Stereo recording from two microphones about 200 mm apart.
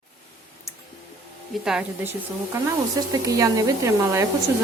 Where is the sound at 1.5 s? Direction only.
Centre (ahead or behind).